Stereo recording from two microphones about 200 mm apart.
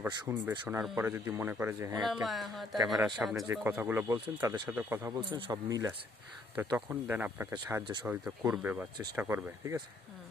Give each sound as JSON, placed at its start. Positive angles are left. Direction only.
{"t": 0.0, "sound": "speech", "side_deg": -10}
{"t": 2.2, "sound": "a man's voice", "side_deg": 0}